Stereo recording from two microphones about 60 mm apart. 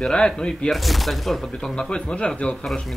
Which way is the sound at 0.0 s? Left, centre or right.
Centre.